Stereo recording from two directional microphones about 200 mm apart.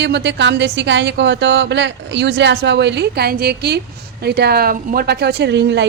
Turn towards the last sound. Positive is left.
turn(degrees=-60)  # may be behind; listen again after turning